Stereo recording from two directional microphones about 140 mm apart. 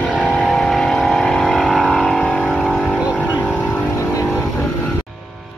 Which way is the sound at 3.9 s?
20° left (ahead or behind).